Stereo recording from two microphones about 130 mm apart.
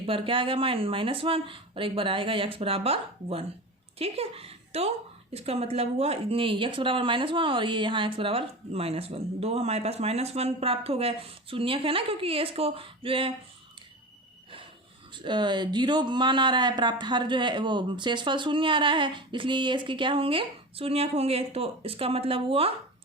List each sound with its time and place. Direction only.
0.0 s a woman's voice: 45° right (ahead or behind)
15.1 s speech: 35° right (ahead or behind)